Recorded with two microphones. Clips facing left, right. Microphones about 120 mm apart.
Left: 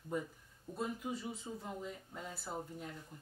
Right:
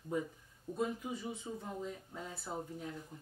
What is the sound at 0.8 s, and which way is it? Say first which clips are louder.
Speech: right 2 dB; centre (ahead or behind).